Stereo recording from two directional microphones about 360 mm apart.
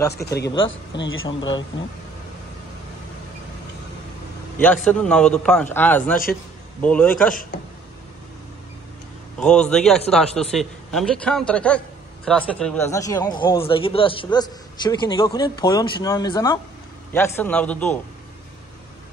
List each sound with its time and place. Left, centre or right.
0.1 s a man's voice: left
4.6 s a man's voice: centre
7.1 s a man's voice: left
9.4 s a man's voice: centre